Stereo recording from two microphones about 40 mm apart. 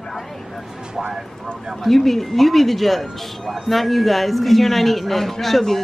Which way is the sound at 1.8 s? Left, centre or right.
Centre.